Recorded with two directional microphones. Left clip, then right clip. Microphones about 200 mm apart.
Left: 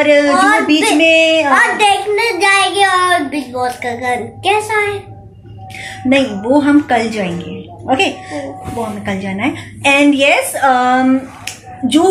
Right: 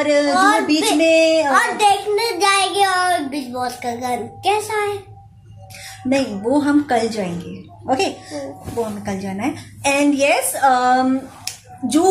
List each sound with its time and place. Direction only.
0.0 s a woman's voice: 10° right (ahead or behind)
0.3 s a child's voice: 25° right (ahead or behind)
1.0 s a woman's voice: 10° right (ahead or behind)
1.5 s a child's voice: 25° right (ahead or behind)
5.8 s a woman's voice: 10° right (ahead or behind)